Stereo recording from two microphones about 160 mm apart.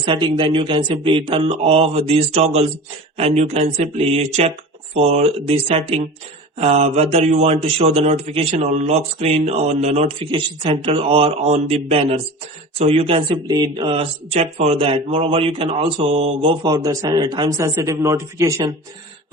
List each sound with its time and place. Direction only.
0.0 s speech: 30° right (ahead or behind)